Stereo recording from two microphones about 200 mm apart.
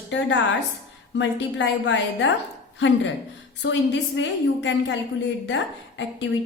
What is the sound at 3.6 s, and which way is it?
A woman's voice, 70° left (ahead or behind).